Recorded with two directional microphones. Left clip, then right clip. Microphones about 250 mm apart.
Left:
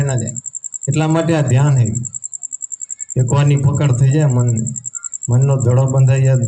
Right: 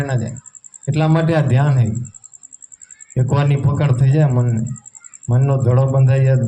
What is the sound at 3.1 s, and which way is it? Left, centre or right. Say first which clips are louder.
A man's voice: left 1 dB; left.